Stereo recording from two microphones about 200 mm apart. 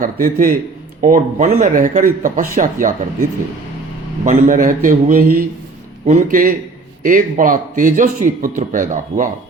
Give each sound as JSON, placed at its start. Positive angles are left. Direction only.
{"t": 0.0, "sound": "a man's voice", "side_deg": -45}
{"t": 4.3, "sound": "a man's voice", "side_deg": -40}